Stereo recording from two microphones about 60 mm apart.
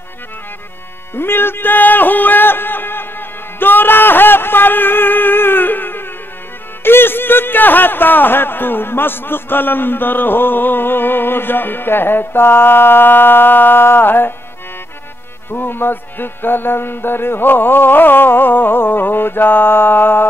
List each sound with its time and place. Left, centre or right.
1.1 s music: left
6.8 s speech: left
15.5 s speech: left